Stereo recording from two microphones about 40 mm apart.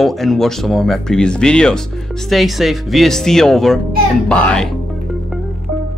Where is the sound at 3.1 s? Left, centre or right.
Centre.